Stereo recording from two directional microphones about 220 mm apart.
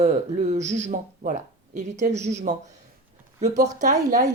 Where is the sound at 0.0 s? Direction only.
35° right (ahead or behind).